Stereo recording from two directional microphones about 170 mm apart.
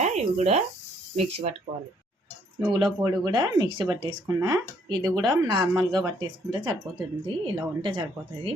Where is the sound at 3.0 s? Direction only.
25° right (ahead or behind).